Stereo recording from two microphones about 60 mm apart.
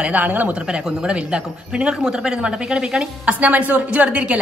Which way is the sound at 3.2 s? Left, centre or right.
Right.